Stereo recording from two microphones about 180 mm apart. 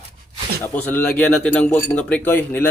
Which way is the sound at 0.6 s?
10° left (ahead or behind).